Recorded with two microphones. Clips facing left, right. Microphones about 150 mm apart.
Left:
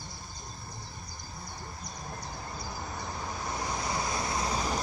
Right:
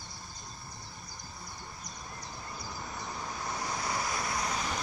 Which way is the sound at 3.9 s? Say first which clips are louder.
Left 2 dB; 25° left (ahead or behind).